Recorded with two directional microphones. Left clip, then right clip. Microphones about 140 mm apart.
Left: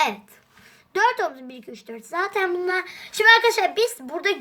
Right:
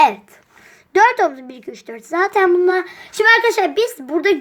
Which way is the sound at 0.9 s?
35° right (ahead or behind).